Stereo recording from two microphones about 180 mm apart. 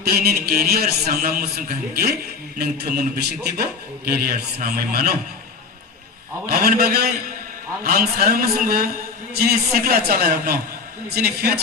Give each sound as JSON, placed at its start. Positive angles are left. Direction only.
{"t": 0.0, "sound": "a man's voice", "side_deg": -60}
{"t": 6.5, "sound": "a man's voice", "side_deg": -55}